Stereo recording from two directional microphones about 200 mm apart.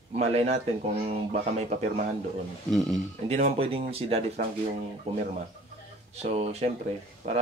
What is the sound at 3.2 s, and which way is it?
Speech, 35° right (ahead or behind).